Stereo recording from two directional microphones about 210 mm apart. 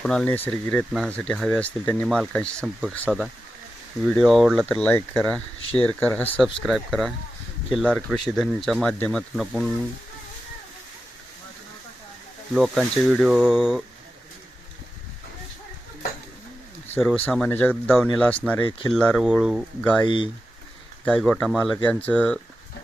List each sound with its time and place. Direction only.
0.0 s speech: 5° left (ahead or behind)
12.5 s speech: centre (ahead or behind)
17.0 s speech: 5° left (ahead or behind)
20.1 s speech: 20° left (ahead or behind)
21.0 s speech: 5° left (ahead or behind)